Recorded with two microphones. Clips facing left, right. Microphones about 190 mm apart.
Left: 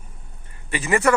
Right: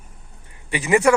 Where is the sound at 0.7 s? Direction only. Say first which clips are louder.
Right 3 dB; 15° right (ahead or behind).